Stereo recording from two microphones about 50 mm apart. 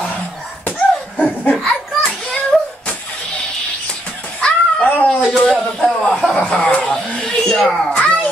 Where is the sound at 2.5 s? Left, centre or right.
Centre.